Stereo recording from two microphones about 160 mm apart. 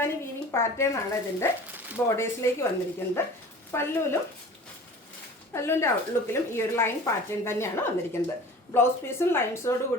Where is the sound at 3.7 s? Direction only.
15° left (ahead or behind).